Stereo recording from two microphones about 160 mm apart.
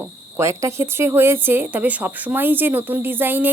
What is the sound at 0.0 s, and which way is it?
Speech, 15° right (ahead or behind).